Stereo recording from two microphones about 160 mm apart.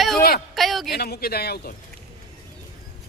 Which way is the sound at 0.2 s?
70° left (ahead or behind).